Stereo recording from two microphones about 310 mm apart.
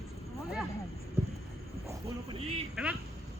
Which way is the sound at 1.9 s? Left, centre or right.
Centre.